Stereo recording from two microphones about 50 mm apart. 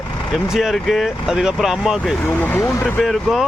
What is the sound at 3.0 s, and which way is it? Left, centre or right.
Speech, centre.